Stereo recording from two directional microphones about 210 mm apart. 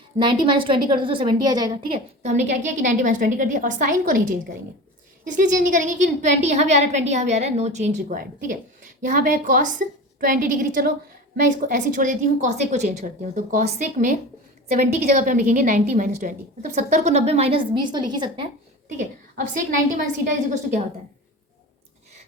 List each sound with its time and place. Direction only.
0.2 s a woman's voice: 25° right (ahead or behind)
18.9 s a woman's voice: 40° right (ahead or behind)